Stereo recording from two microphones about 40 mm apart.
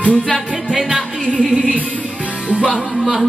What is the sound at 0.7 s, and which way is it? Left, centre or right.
Music, centre.